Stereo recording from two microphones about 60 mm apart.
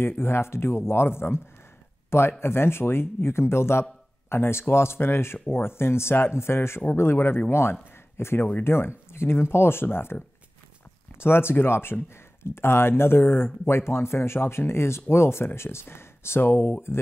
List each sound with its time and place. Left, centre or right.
0.2 s speech: left
11.1 s speech: left